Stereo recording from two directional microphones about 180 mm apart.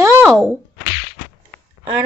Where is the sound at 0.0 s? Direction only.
15° right (ahead or behind).